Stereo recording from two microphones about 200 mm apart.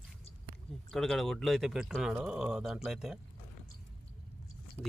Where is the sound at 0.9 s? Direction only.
Centre (ahead or behind).